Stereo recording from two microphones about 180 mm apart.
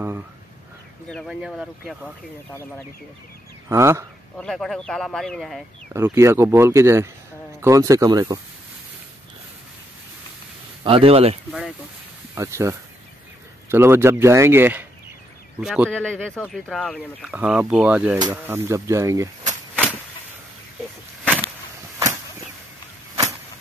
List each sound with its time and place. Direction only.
1.0 s speech: centre (ahead or behind)
3.6 s speech: 15° right (ahead or behind)
4.4 s speech: centre (ahead or behind)
5.9 s speech: 15° right (ahead or behind)
10.8 s speech: 30° right (ahead or behind)
12.4 s speech: 15° right (ahead or behind); by 17.3 s centre (ahead or behind)
17.3 s speech: 10° right (ahead or behind)
21.2 s a sound: 5° left (ahead or behind)